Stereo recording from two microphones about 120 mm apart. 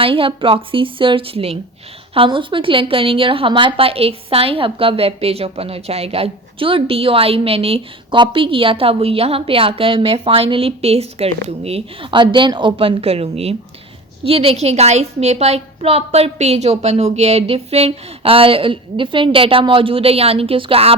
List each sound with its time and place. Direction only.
0.0 s a woman's voice: 50° right (ahead or behind)
12.1 s a woman's voice: 40° right (ahead or behind)